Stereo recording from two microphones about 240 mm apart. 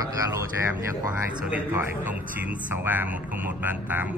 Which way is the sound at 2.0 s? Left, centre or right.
Centre.